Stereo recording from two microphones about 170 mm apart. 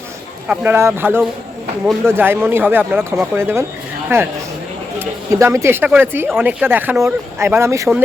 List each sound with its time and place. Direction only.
0.4 s speech: 10° right (ahead or behind)